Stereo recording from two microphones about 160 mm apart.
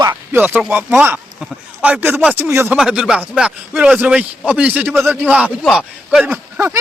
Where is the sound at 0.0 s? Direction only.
10° right (ahead or behind).